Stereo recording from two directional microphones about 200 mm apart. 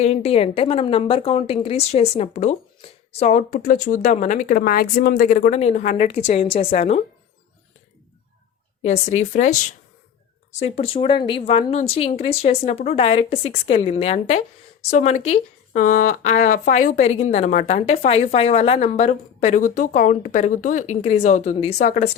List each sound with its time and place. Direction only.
0.0 s a woman's voice: 30° left (ahead or behind)
8.8 s a woman's voice: 35° left (ahead or behind)